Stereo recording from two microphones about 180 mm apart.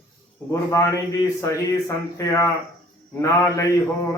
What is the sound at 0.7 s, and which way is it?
Speech, 15° left (ahead or behind).